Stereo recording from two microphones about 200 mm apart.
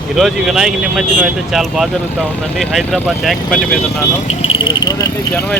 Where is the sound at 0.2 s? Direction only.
Centre (ahead or behind).